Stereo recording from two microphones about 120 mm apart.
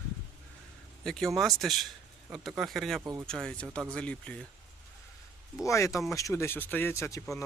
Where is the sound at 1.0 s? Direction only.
5° left (ahead or behind).